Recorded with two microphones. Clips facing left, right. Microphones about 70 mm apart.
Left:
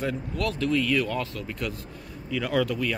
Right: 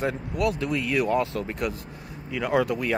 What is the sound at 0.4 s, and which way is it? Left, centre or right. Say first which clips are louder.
Speech: even; centre.